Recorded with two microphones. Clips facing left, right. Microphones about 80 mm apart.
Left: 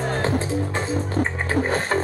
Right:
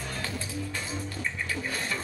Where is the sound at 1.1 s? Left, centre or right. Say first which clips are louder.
Left 12 dB; left.